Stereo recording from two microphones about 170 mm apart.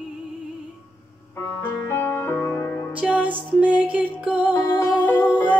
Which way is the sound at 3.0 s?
10° right (ahead or behind).